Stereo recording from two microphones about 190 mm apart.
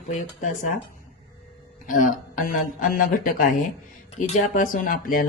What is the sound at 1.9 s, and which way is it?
Speech, 45° left (ahead or behind).